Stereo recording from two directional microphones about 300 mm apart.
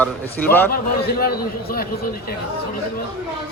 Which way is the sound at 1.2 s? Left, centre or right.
Left.